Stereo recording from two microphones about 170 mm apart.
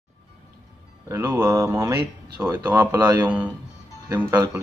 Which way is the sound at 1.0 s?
15° right (ahead or behind).